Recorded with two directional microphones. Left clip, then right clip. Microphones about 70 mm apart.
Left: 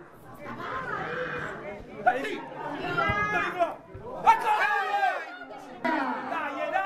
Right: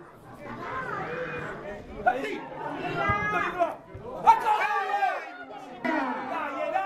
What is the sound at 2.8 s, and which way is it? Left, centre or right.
Chatter, left.